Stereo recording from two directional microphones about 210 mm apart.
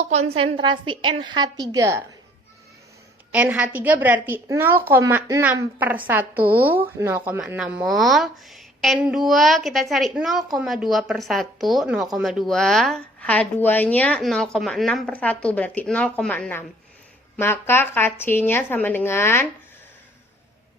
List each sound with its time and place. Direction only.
0.0 s a woman's voice: 30° right (ahead or behind); by 2.0 s 15° right (ahead or behind)
3.3 s a woman's voice: 5° right (ahead or behind); by 19.5 s 10° left (ahead or behind)